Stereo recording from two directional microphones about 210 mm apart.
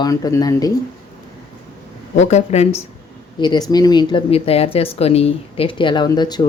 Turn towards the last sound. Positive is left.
turn(degrees=20)  # may be behind; listen again after turning